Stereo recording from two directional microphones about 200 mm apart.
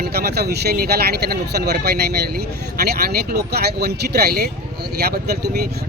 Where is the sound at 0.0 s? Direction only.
50° right (ahead or behind).